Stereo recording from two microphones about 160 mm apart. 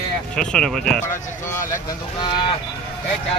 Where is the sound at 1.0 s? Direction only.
15° left (ahead or behind).